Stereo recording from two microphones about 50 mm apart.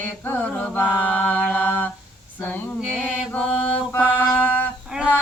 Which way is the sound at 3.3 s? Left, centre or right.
Left.